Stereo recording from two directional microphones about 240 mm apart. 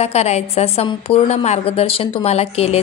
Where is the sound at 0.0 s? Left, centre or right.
Left.